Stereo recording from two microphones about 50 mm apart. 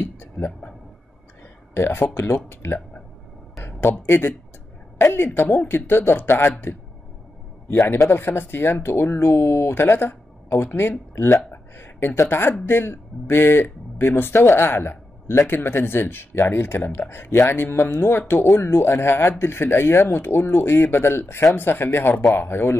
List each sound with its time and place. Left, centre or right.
0.0 s a sound: left
1.7 s speech: left
4.0 s speech: left
8.1 s speech: left
9.8 s speech: left